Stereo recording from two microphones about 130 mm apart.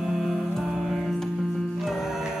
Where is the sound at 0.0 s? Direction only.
Centre (ahead or behind).